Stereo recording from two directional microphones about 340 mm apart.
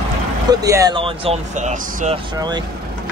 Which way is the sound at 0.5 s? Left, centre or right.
Centre.